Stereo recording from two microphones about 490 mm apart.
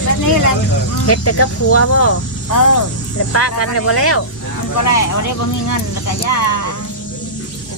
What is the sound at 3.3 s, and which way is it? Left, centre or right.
Speech, left.